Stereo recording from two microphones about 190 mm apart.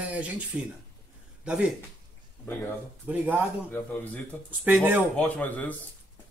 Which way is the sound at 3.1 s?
10° right (ahead or behind).